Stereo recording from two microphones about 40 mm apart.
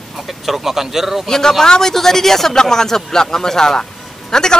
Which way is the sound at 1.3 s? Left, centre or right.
Centre.